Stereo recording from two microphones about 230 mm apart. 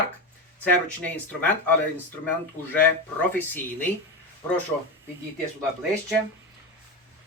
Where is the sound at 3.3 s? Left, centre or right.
Centre.